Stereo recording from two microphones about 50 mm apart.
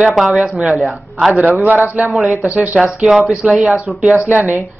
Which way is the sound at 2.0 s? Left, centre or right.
Centre.